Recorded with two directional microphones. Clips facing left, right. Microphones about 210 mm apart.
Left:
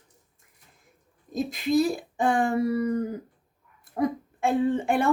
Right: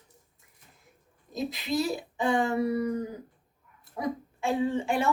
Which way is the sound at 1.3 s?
50° left (ahead or behind).